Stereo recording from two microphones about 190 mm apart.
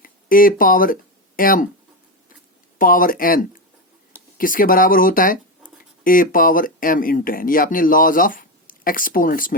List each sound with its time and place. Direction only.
0.0 s speech: 50° left (ahead or behind)
2.7 s speech: 45° left (ahead or behind)